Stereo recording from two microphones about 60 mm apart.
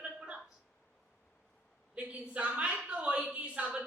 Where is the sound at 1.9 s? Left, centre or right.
Right.